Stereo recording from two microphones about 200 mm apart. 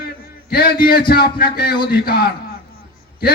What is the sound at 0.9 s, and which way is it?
A man's voice, 50° left (ahead or behind).